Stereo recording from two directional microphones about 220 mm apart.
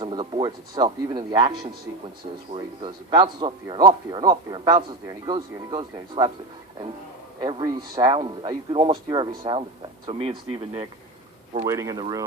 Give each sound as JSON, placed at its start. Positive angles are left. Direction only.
{"t": 0.0, "sound": "a man's voice", "side_deg": -20}
{"t": 2.8, "sound": "a man's voice", "side_deg": -20}
{"t": 7.4, "sound": "a man's voice", "side_deg": -20}
{"t": 11.6, "sound": "speech", "side_deg": -15}